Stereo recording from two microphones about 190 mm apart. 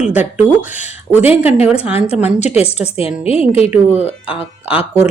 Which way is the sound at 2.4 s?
35° left (ahead or behind).